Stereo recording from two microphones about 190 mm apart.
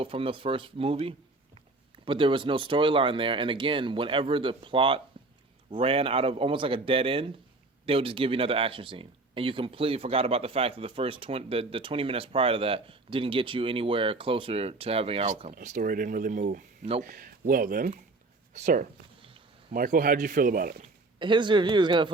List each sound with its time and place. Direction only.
0.0 s speech: 30° right (ahead or behind); by 20.8 s 50° right (ahead or behind)
21.2 s speech: 25° right (ahead or behind)